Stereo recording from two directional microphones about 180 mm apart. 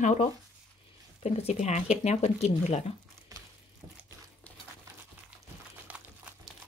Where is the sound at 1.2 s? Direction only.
35° left (ahead or behind).